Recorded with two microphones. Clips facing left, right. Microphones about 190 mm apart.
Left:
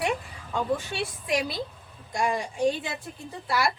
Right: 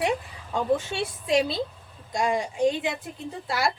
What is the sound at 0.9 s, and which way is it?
A woman's voice, 25° right (ahead or behind).